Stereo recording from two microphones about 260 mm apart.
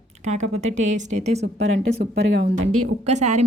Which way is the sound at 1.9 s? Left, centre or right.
Right.